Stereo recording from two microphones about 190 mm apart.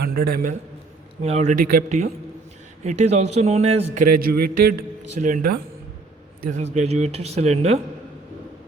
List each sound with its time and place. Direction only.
0.0 s a man's voice: 50° right (ahead or behind)
1.2 s speech: 35° right (ahead or behind)
4.0 s a man's voice: 50° right (ahead or behind)
6.7 s speech: 35° right (ahead or behind)